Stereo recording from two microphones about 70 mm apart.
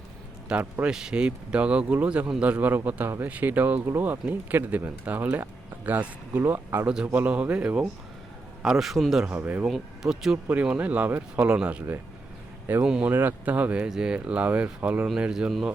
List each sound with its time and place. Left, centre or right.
0.5 s speech: centre; by 6.8 s right
6.8 s speech: centre
8.6 s a man's voice: centre
9.3 s speech: right
9.6 s speech: centre
10.5 s speech: right
12.8 s speech: centre
13.1 s speech: right
15.0 s speech: centre